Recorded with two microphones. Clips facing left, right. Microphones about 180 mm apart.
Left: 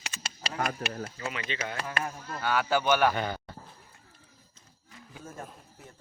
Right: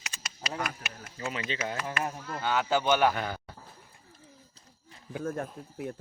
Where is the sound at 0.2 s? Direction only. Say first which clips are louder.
Left 2 dB; 30° left (ahead or behind).